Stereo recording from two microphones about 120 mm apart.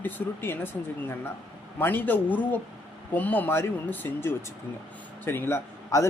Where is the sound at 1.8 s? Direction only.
15° left (ahead or behind).